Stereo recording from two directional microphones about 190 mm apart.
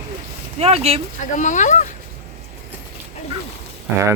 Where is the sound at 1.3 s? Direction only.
40° left (ahead or behind).